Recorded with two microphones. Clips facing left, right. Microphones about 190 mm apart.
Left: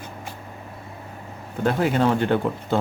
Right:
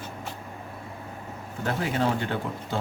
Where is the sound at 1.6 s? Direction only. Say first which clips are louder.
Left 6 dB; 60° left (ahead or behind).